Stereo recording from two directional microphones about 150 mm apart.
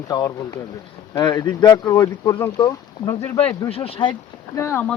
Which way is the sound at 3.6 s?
40° left (ahead or behind).